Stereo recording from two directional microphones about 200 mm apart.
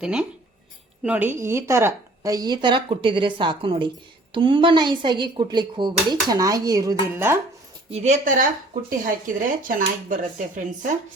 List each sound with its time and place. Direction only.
0.0 s a woman's voice: 5° right (ahead or behind)
7.9 s speech: 35° right (ahead or behind)